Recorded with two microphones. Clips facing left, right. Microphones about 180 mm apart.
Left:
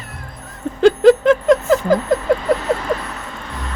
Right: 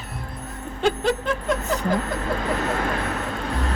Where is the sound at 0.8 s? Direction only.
90° left.